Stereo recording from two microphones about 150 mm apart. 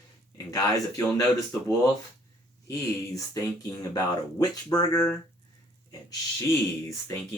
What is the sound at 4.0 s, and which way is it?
Speech, 25° left (ahead or behind).